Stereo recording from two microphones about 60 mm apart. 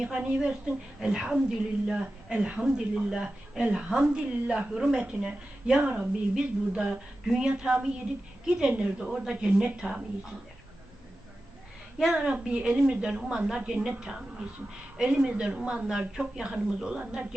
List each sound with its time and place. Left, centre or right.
0.2 s a woman's voice: centre
9.0 s a woman's voice: centre
11.9 s a woman's voice: centre
12.2 s a woman's voice: centre